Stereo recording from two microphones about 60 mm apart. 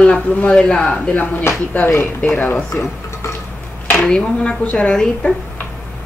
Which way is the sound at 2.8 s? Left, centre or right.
Left.